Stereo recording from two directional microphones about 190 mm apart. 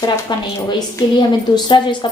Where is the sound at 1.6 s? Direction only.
25° left (ahead or behind).